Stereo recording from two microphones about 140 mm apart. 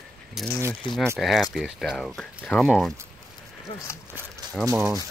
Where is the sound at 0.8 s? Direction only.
35° left (ahead or behind).